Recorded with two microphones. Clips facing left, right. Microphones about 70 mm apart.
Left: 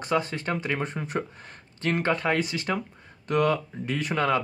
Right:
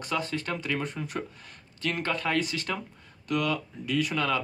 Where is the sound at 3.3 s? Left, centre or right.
Left.